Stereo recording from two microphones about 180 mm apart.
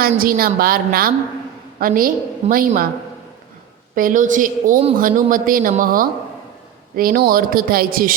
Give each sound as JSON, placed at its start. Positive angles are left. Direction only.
{"t": 0.0, "sound": "a woman's voice", "side_deg": -55}
{"t": 3.9, "sound": "speech", "side_deg": -50}